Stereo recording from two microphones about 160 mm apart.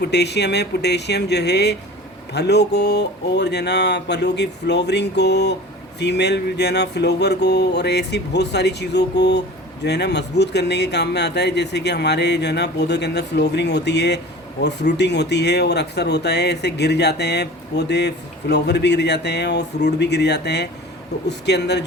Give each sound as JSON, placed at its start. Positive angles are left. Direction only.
{"t": 0.0, "sound": "speech", "side_deg": 90}